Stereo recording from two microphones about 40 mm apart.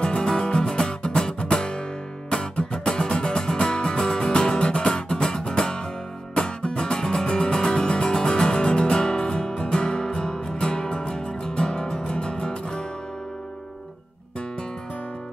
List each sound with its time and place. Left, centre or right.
0.0 s music: left